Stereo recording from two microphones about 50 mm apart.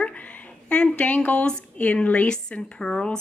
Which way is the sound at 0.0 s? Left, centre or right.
Left.